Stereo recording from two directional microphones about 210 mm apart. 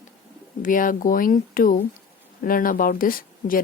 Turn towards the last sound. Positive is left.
turn(degrees=40)  # may be behind; listen again after turning